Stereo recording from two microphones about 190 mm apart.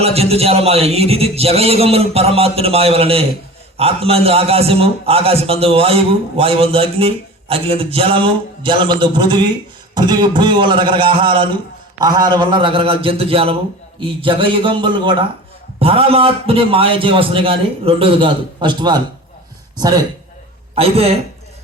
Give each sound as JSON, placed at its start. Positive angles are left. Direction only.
{"t": 0.0, "sound": "a man's voice", "side_deg": -30}
{"t": 20.7, "sound": "a man's voice", "side_deg": -30}